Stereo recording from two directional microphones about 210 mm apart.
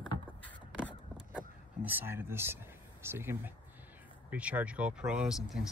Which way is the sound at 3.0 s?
10° right (ahead or behind).